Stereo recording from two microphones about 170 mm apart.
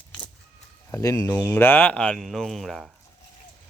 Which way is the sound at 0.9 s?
15° left (ahead or behind).